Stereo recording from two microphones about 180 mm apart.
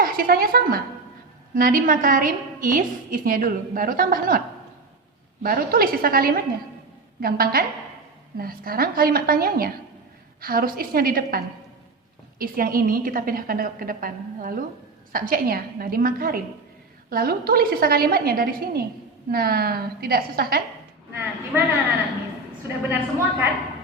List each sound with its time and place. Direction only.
0.0 s a woman's voice: 55° right (ahead or behind)
22.9 s a woman's voice: 10° right (ahead or behind)